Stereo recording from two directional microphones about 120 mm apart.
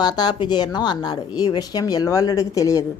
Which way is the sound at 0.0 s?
35° left (ahead or behind).